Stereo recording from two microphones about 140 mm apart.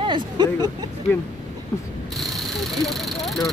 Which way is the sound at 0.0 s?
35° right (ahead or behind).